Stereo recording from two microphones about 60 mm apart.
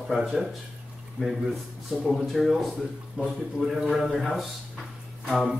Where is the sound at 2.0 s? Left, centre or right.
Centre.